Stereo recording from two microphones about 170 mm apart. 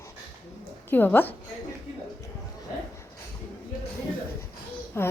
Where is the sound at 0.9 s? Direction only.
10° left (ahead or behind).